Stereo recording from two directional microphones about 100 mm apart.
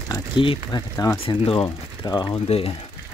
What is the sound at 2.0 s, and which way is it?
Speech, 45° left (ahead or behind).